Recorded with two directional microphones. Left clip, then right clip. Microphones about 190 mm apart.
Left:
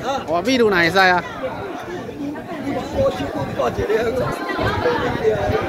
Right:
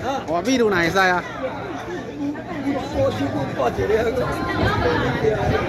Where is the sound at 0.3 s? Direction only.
5° left (ahead or behind).